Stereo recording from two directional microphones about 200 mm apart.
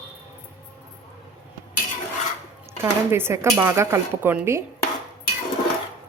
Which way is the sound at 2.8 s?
10° right (ahead or behind).